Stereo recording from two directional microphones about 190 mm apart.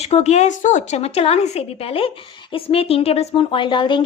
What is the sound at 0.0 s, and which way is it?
A woman's voice, 35° left (ahead or behind).